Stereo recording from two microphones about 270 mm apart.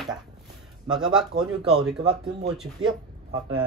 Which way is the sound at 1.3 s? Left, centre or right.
Right.